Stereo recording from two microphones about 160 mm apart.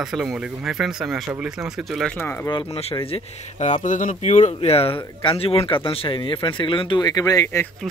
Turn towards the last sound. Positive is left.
turn(degrees=20)  # may be behind; listen again after turning